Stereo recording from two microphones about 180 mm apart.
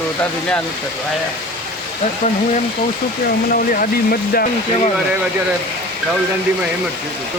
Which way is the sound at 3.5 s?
55° left (ahead or behind).